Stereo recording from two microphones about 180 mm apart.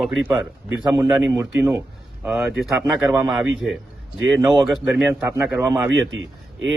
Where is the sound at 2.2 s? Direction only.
Centre (ahead or behind).